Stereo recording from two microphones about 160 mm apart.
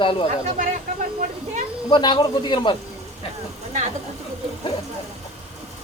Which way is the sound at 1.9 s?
30° left (ahead or behind).